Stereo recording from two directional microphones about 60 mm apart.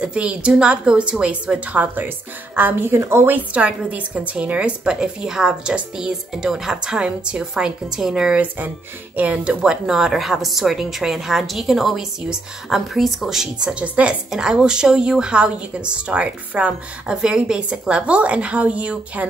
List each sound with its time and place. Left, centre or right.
0.0 s a woman's voice: centre
2.0 s a woman's voice: right
3.3 s a woman's voice: right
8.4 s a woman's voice: right
9.8 s a woman's voice: centre
13.8 s a woman's voice: right